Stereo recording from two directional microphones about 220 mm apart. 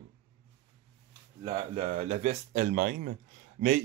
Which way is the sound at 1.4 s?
25° right (ahead or behind).